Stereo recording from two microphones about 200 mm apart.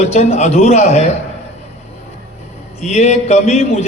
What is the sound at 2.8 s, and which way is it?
A man's voice, 35° left (ahead or behind).